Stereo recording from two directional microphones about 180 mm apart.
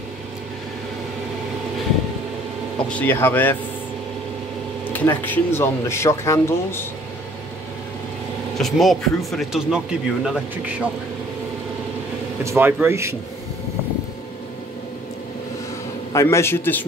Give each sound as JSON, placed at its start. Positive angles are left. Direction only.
{"t": 2.9, "sound": "speech", "side_deg": 10}
{"t": 4.9, "sound": "speech", "side_deg": 10}
{"t": 8.5, "sound": "speech", "side_deg": 0}
{"t": 12.4, "sound": "speech", "side_deg": -10}
{"t": 16.1, "sound": "speech", "side_deg": 15}